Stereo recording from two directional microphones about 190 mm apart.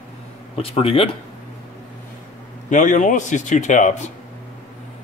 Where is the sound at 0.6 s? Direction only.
30° left (ahead or behind).